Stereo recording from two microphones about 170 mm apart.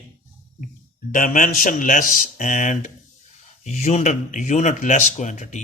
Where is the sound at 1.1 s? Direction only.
50° left (ahead or behind).